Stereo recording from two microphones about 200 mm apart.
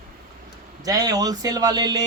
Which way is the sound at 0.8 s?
20° right (ahead or behind).